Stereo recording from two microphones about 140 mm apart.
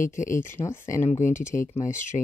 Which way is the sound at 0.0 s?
65° left (ahead or behind).